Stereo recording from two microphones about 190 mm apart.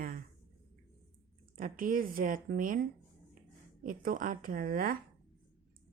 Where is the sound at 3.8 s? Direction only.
45° right (ahead or behind).